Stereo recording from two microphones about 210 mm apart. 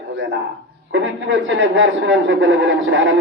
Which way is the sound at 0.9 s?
60° right (ahead or behind).